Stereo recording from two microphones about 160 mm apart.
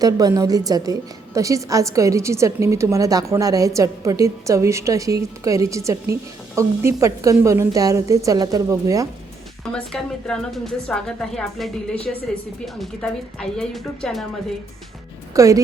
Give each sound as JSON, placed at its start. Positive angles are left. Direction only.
{"t": 0.0, "sound": "a woman's voice", "side_deg": -20}
{"t": 9.7, "sound": "a woman's voice", "side_deg": 5}
{"t": 15.3, "sound": "a woman's voice", "side_deg": -20}